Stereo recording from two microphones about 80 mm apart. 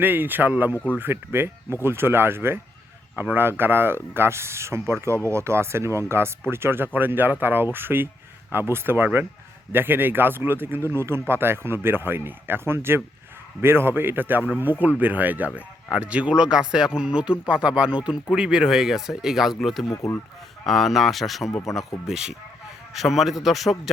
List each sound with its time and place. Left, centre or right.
0.0 s a man's voice: right; by 23.9 s centre